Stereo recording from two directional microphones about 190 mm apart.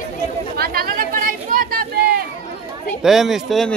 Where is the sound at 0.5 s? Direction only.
55° right (ahead or behind).